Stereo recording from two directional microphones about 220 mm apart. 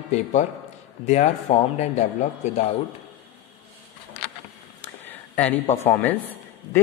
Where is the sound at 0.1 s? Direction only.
35° left (ahead or behind).